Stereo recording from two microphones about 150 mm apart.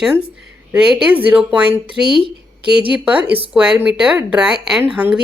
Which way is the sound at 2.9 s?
10° right (ahead or behind).